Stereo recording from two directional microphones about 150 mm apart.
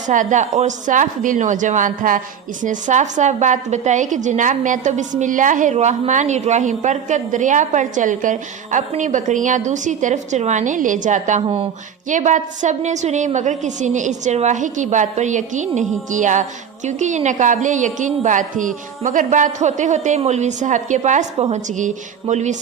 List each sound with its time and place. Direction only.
0.1 s speech: 55° right (ahead or behind)
11.4 s speech: 40° right (ahead or behind)
12.0 s a woman's voice: 55° right (ahead or behind)